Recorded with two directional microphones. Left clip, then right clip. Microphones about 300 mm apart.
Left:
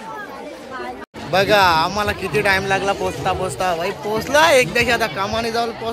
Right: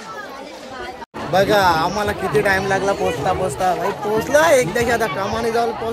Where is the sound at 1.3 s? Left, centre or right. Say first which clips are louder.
Left 1 dB; centre.